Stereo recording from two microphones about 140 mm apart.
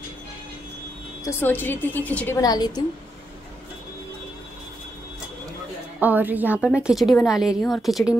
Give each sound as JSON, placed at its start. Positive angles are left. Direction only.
{"t": 1.4, "sound": "a woman's voice", "side_deg": 15}
{"t": 2.4, "sound": "a woman's voice", "side_deg": 30}
{"t": 5.9, "sound": "a woman's voice", "side_deg": -10}